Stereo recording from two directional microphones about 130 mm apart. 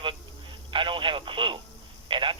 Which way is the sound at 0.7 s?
40° right (ahead or behind).